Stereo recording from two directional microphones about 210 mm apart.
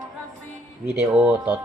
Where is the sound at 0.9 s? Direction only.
5° right (ahead or behind).